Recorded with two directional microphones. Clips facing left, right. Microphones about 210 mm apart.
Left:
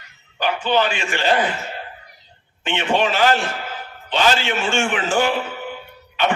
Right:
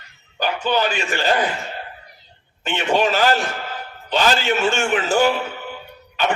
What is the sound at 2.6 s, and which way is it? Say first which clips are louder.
A man's voice: right 1 dB; 40° right (ahead or behind).